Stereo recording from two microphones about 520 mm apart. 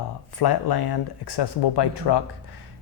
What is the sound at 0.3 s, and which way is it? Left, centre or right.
Speech, left.